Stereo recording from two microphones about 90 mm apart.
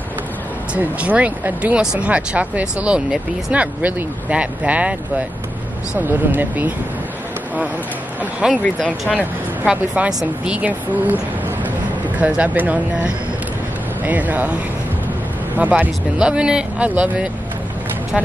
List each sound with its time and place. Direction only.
0.7 s speech: 15° right (ahead or behind)
8.2 s a sound: 10° right (ahead or behind)
8.6 s speech: 15° left (ahead or behind)
9.7 s speech: 10° right (ahead or behind)